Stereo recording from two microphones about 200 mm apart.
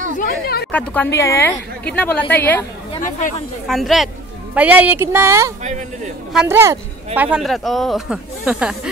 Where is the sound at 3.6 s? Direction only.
Centre (ahead or behind).